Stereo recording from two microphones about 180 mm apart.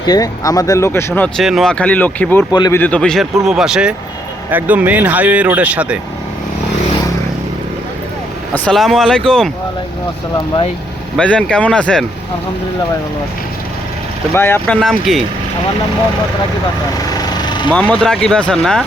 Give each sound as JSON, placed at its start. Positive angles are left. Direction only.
{"t": 0.0, "sound": "speech", "side_deg": 20}
{"t": 1.4, "sound": "speech", "side_deg": 0}
{"t": 2.5, "sound": "speech", "side_deg": 25}
{"t": 2.7, "sound": "speech", "side_deg": 10}
{"t": 8.5, "sound": "speech", "side_deg": 5}
{"t": 11.2, "sound": "speech", "side_deg": 5}
{"t": 14.3, "sound": "speech", "side_deg": 10}
{"t": 17.1, "sound": "vehicle", "side_deg": 20}
{"t": 17.7, "sound": "speech", "side_deg": 5}